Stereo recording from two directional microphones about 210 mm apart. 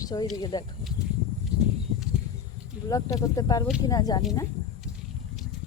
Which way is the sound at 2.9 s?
15° left (ahead or behind).